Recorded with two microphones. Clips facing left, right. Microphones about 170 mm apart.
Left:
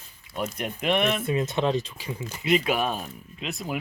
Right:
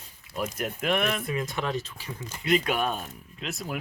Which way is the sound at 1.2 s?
25° left (ahead or behind).